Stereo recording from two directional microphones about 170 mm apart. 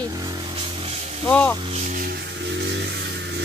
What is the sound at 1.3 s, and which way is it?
Speech, 10° left (ahead or behind).